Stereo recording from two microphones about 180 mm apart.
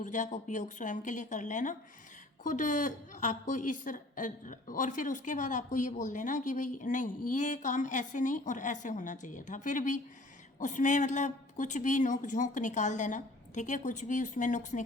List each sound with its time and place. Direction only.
0.0 s a woman's voice: 45° left (ahead or behind)